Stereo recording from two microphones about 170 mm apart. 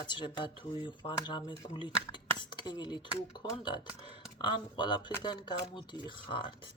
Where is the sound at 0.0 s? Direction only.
25° left (ahead or behind).